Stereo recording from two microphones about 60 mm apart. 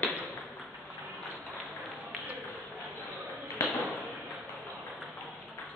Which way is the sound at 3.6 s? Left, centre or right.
Left.